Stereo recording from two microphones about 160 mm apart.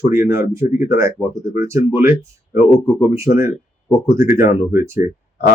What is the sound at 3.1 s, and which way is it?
Speech, 20° right (ahead or behind).